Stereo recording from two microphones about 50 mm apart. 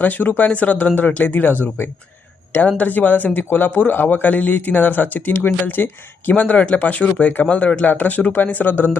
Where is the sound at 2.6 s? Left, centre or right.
Left.